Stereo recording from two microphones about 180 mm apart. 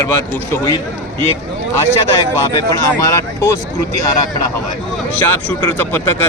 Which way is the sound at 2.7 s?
20° left (ahead or behind).